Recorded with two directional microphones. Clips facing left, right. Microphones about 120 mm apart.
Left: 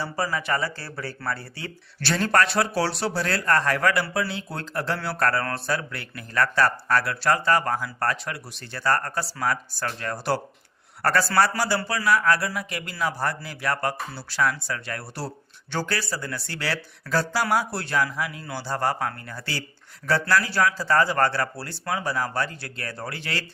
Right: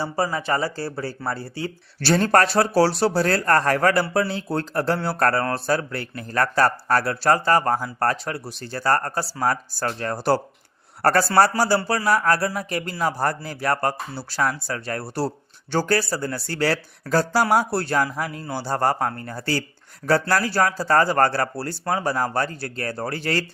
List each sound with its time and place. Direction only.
0.0 s speech: 30° right (ahead or behind)